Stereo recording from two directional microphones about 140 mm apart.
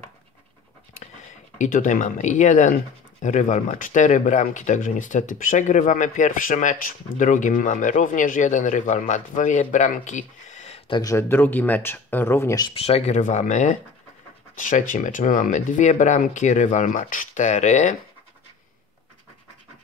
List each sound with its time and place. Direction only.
1.6 s speech: 65° left (ahead or behind)
10.9 s speech: 30° left (ahead or behind)
11.1 s speech: 15° left (ahead or behind)
12.6 s speech: 45° left (ahead or behind)